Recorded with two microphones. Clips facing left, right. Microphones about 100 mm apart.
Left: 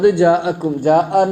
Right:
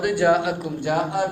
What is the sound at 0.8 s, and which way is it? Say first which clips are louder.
Speech: left 10 dB; 55° left (ahead or behind).